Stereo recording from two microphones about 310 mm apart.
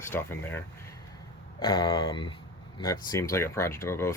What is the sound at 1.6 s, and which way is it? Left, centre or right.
Speech, centre.